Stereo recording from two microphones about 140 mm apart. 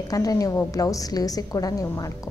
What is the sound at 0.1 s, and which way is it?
A woman's voice, 25° left (ahead or behind).